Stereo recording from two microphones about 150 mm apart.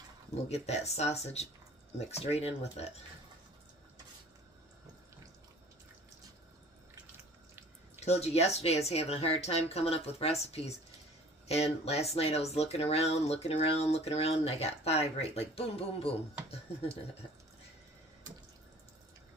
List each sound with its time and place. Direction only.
0.5 s speech: 45° left (ahead or behind)
8.0 s speech: 45° left (ahead or behind)